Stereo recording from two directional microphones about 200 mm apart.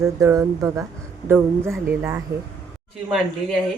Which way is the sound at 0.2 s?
15° right (ahead or behind).